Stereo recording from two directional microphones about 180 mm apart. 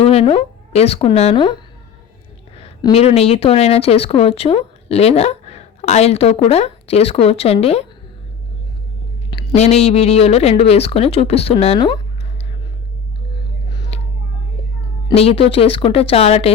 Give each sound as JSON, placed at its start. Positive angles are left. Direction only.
{"t": 0.0, "sound": "speech", "side_deg": 35}
{"t": 2.6, "sound": "speech", "side_deg": 35}
{"t": 9.6, "sound": "speech", "side_deg": 35}
{"t": 13.7, "sound": "a sound", "side_deg": 25}
{"t": 15.1, "sound": "speech", "side_deg": 35}